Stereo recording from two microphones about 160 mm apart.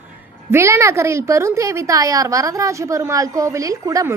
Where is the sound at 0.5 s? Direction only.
20° right (ahead or behind).